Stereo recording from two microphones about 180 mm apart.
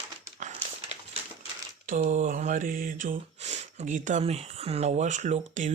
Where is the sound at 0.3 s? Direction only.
40° right (ahead or behind).